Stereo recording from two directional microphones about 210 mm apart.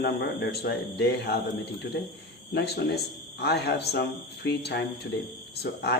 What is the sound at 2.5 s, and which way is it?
Speech, 50° left (ahead or behind).